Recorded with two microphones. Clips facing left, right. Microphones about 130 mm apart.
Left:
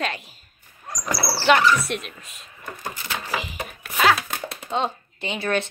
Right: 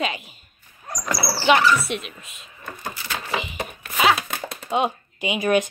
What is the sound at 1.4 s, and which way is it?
Speech, 5° right (ahead or behind).